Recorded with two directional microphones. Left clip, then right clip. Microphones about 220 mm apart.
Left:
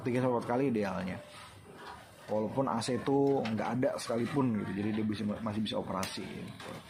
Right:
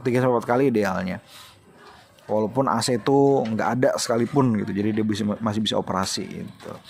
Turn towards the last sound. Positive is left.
turn(degrees=-50)  # may be behind; listen again after turning